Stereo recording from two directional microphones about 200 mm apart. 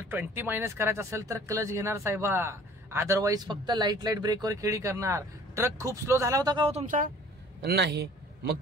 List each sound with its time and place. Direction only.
0.0 s speech: 10° right (ahead or behind); by 7.1 s 35° right (ahead or behind)
7.6 s a man's voice: 55° right (ahead or behind)